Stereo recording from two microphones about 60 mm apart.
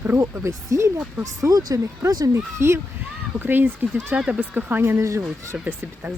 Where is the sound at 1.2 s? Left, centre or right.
Right.